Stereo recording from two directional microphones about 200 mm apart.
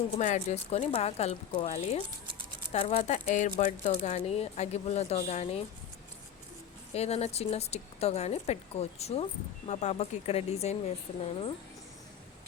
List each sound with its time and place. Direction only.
0.2 s speech: 35° left (ahead or behind)
6.9 s speech: 30° left (ahead or behind)